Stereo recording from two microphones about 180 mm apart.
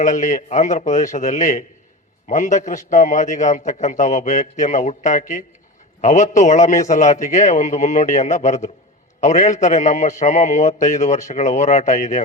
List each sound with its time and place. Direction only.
0.0 s a man's voice: 45° left (ahead or behind)